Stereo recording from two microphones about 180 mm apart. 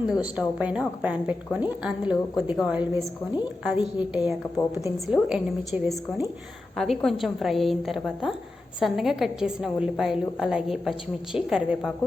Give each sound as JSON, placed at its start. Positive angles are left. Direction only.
{"t": 0.1, "sound": "a woman's voice", "side_deg": -5}